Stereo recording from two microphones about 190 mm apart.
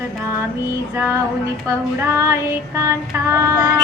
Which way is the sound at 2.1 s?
15° right (ahead or behind).